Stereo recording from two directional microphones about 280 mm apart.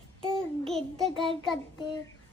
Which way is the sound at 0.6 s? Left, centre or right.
Centre.